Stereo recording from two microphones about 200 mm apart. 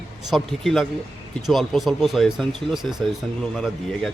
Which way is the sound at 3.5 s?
Centre (ahead or behind).